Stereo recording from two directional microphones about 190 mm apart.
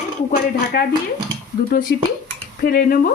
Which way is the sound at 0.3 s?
50° left (ahead or behind).